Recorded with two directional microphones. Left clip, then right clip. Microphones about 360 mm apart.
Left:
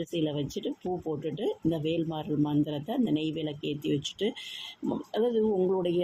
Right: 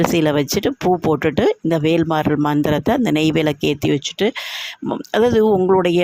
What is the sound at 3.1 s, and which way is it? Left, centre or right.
Speech, right.